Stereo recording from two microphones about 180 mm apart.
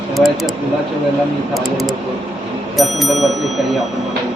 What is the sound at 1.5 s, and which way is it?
Speech, centre (ahead or behind).